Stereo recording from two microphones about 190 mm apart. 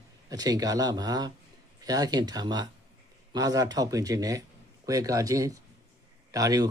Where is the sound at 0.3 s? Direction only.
20° right (ahead or behind).